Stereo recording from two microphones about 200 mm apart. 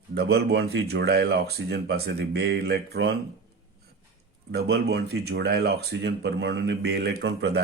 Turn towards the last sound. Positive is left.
turn(degrees=-55)  # may be behind; listen again after turning